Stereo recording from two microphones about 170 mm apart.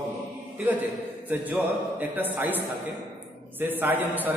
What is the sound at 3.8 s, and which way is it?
Speech, 10° right (ahead or behind).